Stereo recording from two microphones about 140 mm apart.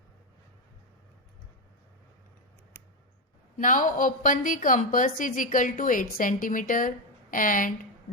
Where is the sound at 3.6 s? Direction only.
70° left (ahead or behind).